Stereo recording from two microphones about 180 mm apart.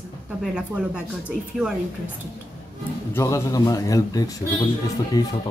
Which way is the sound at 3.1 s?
15° left (ahead or behind).